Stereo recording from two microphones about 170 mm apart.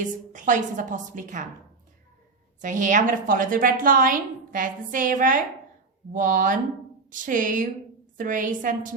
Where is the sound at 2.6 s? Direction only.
50° right (ahead or behind).